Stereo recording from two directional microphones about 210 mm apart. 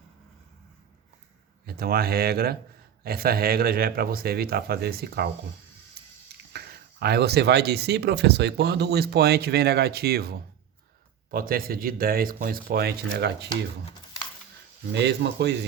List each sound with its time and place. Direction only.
1.6 s speech: 45° right (ahead or behind)
6.5 s speech: 50° right (ahead or behind)
14.9 s speech: 55° right (ahead or behind)